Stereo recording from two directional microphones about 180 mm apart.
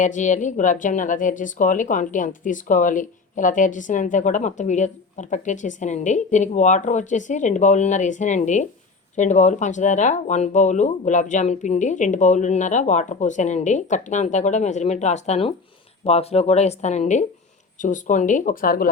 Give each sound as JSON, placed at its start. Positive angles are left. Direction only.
{"t": 0.0, "sound": "speech", "side_deg": 45}